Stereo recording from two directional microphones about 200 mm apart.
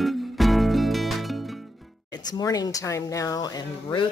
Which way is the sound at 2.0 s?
20° left (ahead or behind).